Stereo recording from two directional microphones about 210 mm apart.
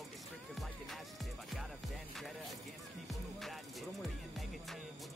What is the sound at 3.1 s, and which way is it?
Music, centre (ahead or behind).